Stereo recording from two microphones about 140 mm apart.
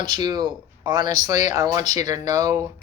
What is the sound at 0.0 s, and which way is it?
Speech, 30° right (ahead or behind).